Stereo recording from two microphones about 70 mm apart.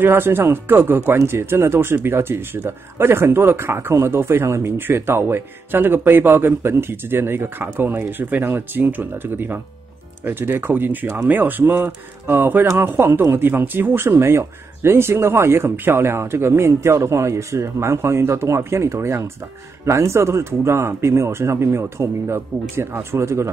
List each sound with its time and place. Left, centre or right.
0.0 s speech: right